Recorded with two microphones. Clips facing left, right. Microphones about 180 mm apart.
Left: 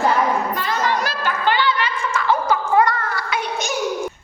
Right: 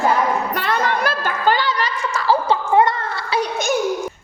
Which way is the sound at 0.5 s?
65° right (ahead or behind).